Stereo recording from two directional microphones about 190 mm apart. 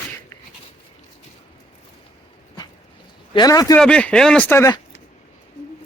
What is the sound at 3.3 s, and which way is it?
Speech, 20° left (ahead or behind).